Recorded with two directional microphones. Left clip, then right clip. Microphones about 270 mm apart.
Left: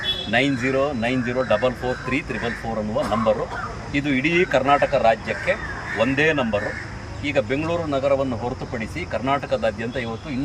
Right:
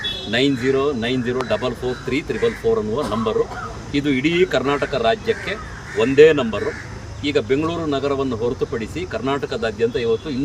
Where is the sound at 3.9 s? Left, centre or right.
Right.